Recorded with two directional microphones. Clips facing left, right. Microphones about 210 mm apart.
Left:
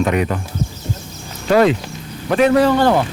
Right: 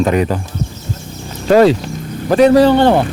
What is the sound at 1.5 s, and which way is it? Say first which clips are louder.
Speech: right 4 dB; 35° right (ahead or behind).